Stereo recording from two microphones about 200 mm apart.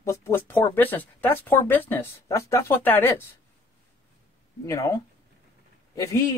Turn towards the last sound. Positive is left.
turn(degrees=15)  # may be behind; listen again after turning